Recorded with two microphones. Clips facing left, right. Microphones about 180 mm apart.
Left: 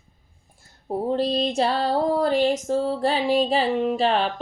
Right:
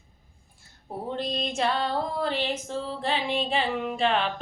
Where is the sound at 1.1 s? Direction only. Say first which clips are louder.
Left 7 dB; 35° left (ahead or behind).